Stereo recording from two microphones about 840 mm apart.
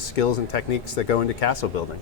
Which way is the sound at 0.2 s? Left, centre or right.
Left.